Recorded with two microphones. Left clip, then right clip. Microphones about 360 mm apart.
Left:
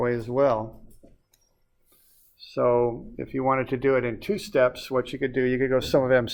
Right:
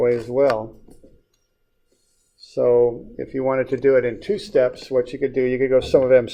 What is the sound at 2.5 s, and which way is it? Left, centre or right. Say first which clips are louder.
Speech: right 6 dB; left.